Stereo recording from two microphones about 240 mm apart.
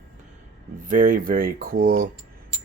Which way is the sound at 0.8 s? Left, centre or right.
Right.